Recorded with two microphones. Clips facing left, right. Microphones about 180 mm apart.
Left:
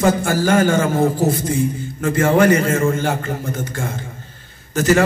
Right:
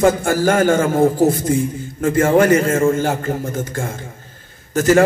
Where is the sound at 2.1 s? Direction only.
45° right (ahead or behind).